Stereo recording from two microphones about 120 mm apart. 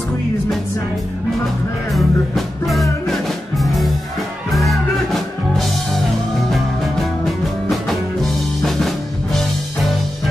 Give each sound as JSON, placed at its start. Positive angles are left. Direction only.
{"t": 1.9, "sound": "music", "side_deg": 0}